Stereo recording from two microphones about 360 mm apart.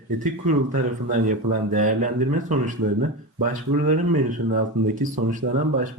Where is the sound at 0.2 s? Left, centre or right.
Right.